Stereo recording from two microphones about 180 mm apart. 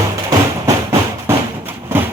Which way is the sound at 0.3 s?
15° right (ahead or behind).